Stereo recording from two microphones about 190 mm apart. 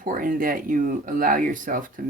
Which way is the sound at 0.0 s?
45° right (ahead or behind).